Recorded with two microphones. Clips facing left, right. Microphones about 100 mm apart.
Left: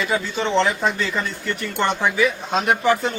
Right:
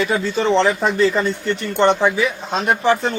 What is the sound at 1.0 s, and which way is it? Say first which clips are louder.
Speech: right 8 dB; 35° right (ahead or behind).